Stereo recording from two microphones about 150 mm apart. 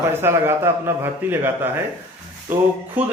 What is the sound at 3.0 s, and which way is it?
Speech, 10° right (ahead or behind).